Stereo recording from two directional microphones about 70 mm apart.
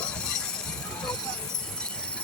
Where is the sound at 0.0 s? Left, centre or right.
Centre.